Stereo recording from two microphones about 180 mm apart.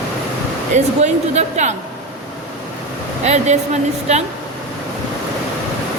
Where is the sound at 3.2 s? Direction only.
40° right (ahead or behind).